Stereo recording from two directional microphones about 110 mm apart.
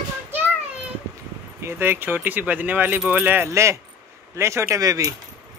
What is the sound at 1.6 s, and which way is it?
Speech, 20° right (ahead or behind).